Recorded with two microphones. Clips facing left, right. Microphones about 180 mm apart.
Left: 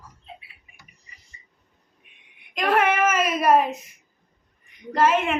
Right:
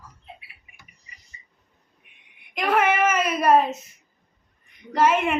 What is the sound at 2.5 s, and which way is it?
A woman's voice, 5° right (ahead or behind).